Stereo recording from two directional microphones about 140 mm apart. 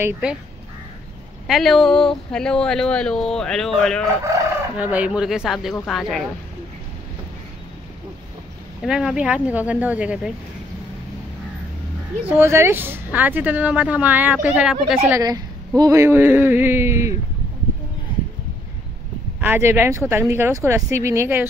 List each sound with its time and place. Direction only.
0.2 s speech: 10° right (ahead or behind)
1.5 s speech: centre (ahead or behind)
4.7 s speech: 10° right (ahead or behind)
8.8 s speech: 5° right (ahead or behind)
12.3 s speech: 20° right (ahead or behind)
15.0 s a woman's voice: 25° right (ahead or behind)
19.4 s speech: 15° right (ahead or behind)